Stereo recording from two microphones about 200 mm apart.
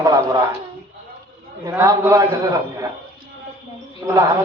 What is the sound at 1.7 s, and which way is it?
Speech, 10° right (ahead or behind).